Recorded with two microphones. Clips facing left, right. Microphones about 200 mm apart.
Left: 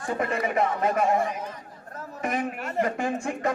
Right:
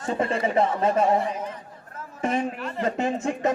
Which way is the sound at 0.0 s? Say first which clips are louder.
Right 2 dB; 25° right (ahead or behind).